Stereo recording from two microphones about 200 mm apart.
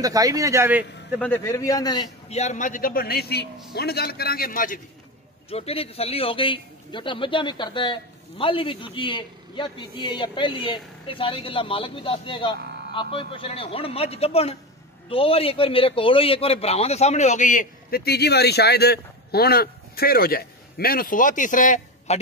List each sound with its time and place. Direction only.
0.0 s a man's voice: 20° right (ahead or behind)
1.2 s a man's voice: 10° left (ahead or behind)
2.2 s a man's voice: 35° left (ahead or behind)
5.5 s a man's voice: 30° left (ahead or behind)